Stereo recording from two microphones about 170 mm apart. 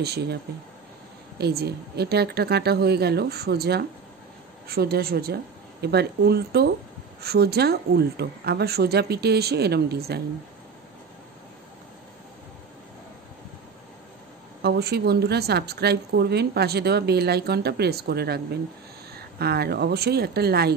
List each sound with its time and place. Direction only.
0.0 s a woman's voice: 75° right (ahead or behind)
1.4 s a woman's voice: 70° right (ahead or behind)
14.6 s a woman's voice: 70° right (ahead or behind)